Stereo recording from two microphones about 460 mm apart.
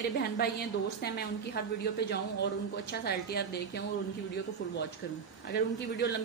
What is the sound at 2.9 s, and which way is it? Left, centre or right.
Speech, left.